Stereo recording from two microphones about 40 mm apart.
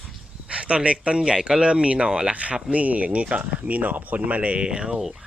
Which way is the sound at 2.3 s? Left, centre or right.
Right.